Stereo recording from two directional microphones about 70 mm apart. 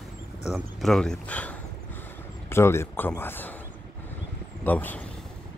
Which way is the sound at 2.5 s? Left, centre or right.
Left.